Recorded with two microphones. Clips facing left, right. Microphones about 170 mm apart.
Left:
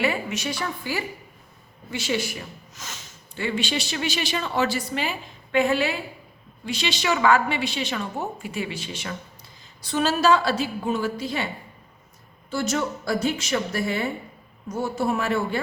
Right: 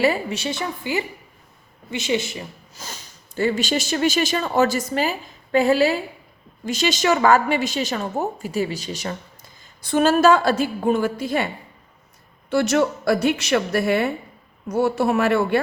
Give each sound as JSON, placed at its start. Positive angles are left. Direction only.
{"t": 0.0, "sound": "a woman's voice", "side_deg": -35}
{"t": 9.8, "sound": "a woman's voice", "side_deg": -50}
{"t": 12.5, "sound": "a woman's voice", "side_deg": -70}